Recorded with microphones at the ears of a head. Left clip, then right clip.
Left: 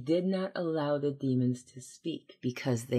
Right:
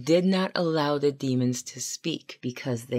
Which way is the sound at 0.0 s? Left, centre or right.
Right.